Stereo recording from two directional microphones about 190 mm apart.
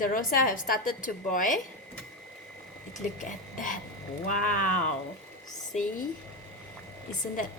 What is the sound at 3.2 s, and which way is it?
A woman's voice, 45° left (ahead or behind).